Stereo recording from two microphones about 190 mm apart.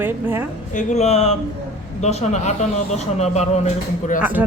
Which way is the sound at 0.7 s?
35° left (ahead or behind).